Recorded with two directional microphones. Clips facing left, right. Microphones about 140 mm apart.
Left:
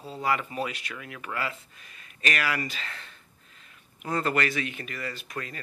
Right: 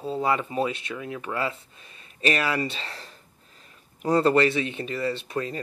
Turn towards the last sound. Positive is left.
turn(degrees=-30)  # may be behind; listen again after turning